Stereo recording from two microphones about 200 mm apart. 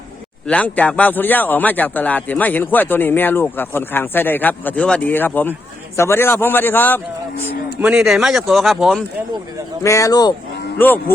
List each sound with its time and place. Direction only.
0.4 s speech: 5° left (ahead or behind)
7.8 s speech: 5° right (ahead or behind)
9.8 s speech: 15° left (ahead or behind)